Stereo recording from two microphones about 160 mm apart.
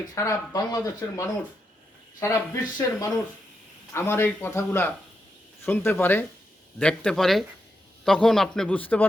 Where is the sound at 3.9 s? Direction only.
15° left (ahead or behind).